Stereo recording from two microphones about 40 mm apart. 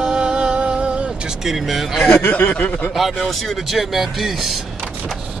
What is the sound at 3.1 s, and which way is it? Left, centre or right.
Speech, centre.